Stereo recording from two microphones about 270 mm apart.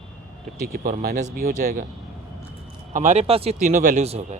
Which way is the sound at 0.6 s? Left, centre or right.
Right.